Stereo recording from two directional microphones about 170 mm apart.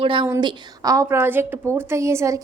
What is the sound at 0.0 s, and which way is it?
A woman's voice, 30° right (ahead or behind).